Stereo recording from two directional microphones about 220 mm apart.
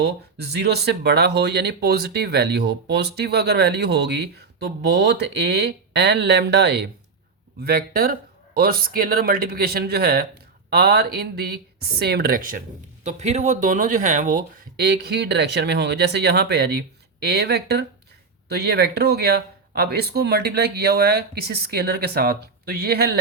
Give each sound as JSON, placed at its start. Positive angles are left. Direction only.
{"t": 0.0, "sound": "speech", "side_deg": -45}